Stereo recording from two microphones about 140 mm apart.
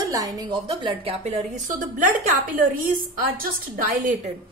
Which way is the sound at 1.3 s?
60° right (ahead or behind).